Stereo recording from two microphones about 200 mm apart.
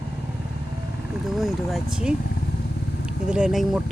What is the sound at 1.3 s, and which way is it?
Speech, centre (ahead or behind).